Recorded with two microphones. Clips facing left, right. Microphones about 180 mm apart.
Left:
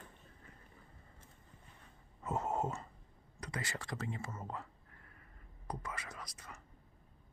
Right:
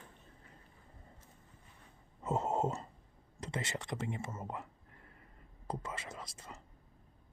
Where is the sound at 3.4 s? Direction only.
25° right (ahead or behind).